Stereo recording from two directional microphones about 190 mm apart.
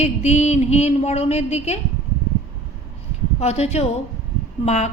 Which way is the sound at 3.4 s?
35° left (ahead or behind).